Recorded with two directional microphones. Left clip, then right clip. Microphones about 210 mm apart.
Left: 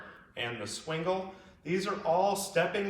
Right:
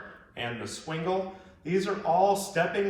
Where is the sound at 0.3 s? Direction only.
30° left (ahead or behind).